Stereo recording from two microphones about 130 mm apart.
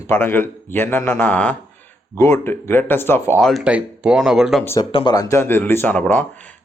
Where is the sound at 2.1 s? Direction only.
25° left (ahead or behind).